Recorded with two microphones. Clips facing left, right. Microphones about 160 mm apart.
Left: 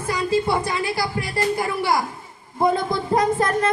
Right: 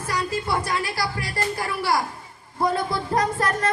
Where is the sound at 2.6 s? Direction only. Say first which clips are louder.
Left 3 dB; 20° left (ahead or behind).